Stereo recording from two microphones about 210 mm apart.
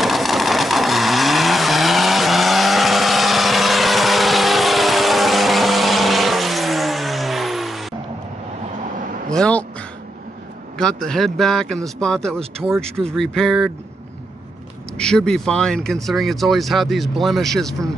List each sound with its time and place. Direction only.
0.0 s vehicle: centre (ahead or behind)
9.3 s a sound: 5° left (ahead or behind)
10.8 s speech: 5° left (ahead or behind)
15.0 s speech: 5° left (ahead or behind)